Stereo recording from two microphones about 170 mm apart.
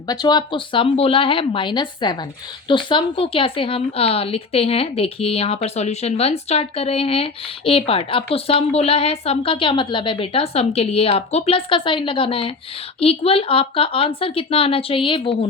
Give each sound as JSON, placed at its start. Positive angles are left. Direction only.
{"t": 0.1, "sound": "a woman's voice", "side_deg": 25}